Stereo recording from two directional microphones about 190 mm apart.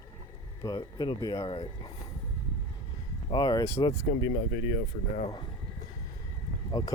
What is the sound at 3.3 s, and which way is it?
Speech, 20° left (ahead or behind).